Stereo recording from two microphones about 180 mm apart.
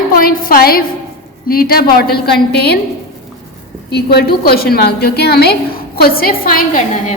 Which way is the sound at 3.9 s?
65° left (ahead or behind).